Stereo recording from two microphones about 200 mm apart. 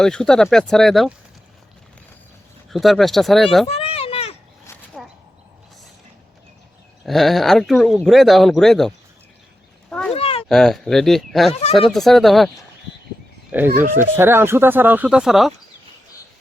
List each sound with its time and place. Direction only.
0.0 s speech: 5° left (ahead or behind)
2.6 s speech: centre (ahead or behind)
3.7 s a sound: 30° left (ahead or behind)
4.9 s a sound: centre (ahead or behind)
7.0 s speech: centre (ahead or behind)
9.9 s cat: 5° left (ahead or behind)
10.2 s cat: 30° left (ahead or behind)
10.5 s speech: centre (ahead or behind)
13.5 s speech: 10° right (ahead or behind)